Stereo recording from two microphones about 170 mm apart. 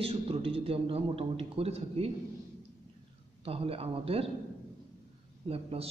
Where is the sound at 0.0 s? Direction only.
35° right (ahead or behind).